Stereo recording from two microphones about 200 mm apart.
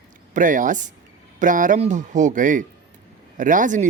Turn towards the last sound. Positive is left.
turn(degrees=-40)  # may be behind; listen again after turning